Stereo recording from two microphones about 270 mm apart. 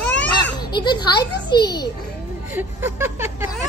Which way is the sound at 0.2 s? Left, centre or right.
Centre.